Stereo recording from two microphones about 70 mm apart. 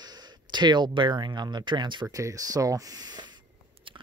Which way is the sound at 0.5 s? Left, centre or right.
Right.